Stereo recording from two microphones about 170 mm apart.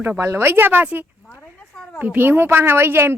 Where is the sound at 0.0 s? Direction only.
15° right (ahead or behind).